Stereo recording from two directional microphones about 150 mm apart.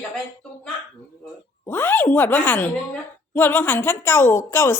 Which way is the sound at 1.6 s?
15° left (ahead or behind).